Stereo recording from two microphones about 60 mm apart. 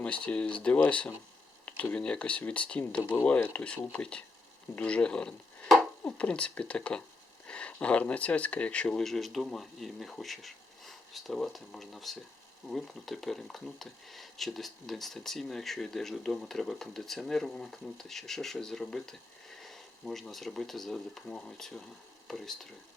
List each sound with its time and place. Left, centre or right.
0.0 s speech: centre